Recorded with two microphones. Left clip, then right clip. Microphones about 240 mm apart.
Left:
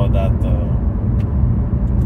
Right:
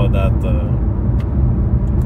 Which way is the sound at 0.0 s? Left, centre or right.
Right.